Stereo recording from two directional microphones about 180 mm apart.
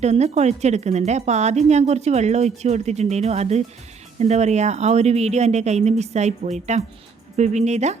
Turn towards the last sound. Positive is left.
turn(degrees=-40)  # may be behind; listen again after turning